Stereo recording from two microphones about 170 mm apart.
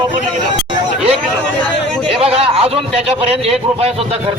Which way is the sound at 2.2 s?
35° right (ahead or behind).